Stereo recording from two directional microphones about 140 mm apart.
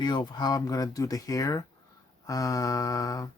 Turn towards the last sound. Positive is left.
turn(degrees=25)  # may be behind; listen again after turning